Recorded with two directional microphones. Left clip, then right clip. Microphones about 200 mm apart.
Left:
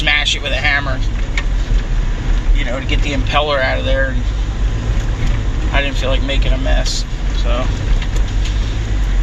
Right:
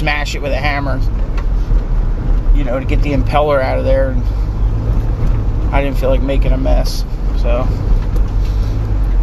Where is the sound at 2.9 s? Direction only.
50° right (ahead or behind).